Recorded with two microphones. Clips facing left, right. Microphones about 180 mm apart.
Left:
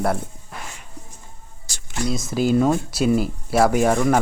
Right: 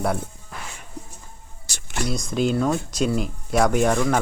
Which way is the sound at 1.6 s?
65° right (ahead or behind).